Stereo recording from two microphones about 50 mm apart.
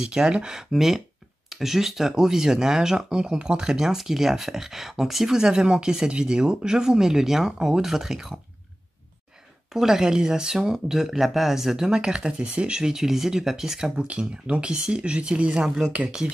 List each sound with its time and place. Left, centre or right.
0.0 s speech: centre
9.7 s speech: centre
14.0 s speech: right
15.6 s speech: centre